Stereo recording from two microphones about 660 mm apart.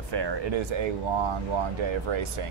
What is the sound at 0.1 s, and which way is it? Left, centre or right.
Speech, right.